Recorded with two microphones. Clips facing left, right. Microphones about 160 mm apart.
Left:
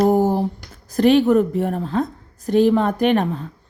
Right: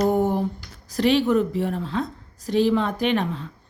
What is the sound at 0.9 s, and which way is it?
A woman's voice, 50° left (ahead or behind).